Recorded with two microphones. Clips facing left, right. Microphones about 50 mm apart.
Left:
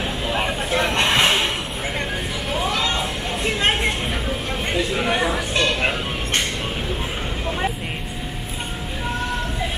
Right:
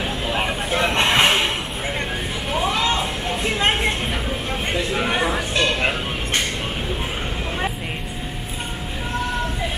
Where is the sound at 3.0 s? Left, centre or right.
Centre.